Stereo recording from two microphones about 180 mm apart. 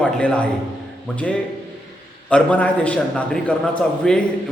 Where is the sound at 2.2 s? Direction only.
5° left (ahead or behind).